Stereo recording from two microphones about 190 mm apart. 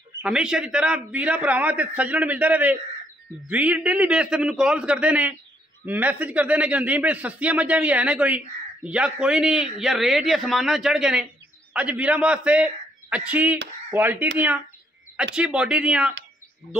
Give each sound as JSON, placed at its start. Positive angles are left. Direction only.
{"t": 0.2, "sound": "a man's voice", "side_deg": -5}
{"t": 15.3, "sound": "a man's voice", "side_deg": -5}